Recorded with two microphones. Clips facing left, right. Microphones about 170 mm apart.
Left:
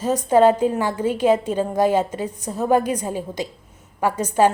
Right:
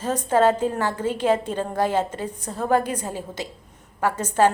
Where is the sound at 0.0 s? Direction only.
10° left (ahead or behind).